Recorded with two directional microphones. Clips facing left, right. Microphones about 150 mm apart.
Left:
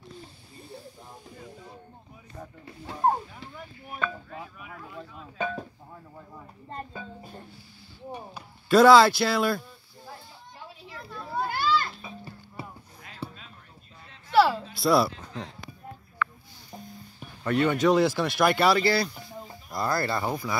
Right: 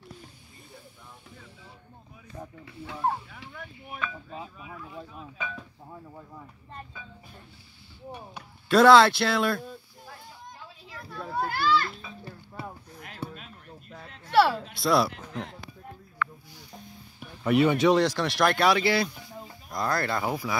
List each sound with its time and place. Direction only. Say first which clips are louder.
2.6 s speech: left 4 dB; 35° left (ahead or behind)
4.3 s speech: right 1 dB; 25° right (ahead or behind)
5.4 s speech: left 8 dB; 50° left (ahead or behind)
6.7 s speech: left 7 dB; 45° left (ahead or behind)
8.6 s speech: left 1 dB; centre (ahead or behind)
11.4 s children playing: right 1 dB; 20° left (ahead or behind)
14.4 s speech: left 1 dB; centre (ahead or behind)
17.4 s speech: right 2 dB; 5° right (ahead or behind)